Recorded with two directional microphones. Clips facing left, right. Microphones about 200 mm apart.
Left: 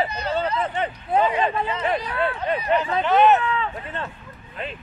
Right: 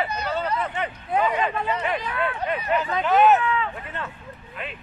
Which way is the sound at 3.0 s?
Centre (ahead or behind).